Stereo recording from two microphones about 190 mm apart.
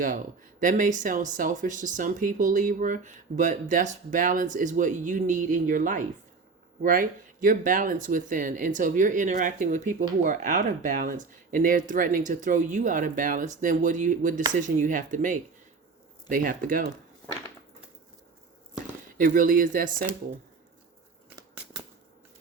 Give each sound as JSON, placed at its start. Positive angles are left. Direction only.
{"t": 0.6, "sound": "speech", "side_deg": -40}
{"t": 19.1, "sound": "speech", "side_deg": -45}